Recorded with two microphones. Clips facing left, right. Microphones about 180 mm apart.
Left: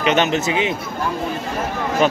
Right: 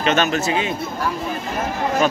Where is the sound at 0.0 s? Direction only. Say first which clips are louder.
Left 1 dB; 20° left (ahead or behind).